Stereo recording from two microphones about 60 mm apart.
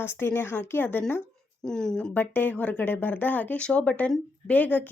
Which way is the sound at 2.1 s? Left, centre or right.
Left.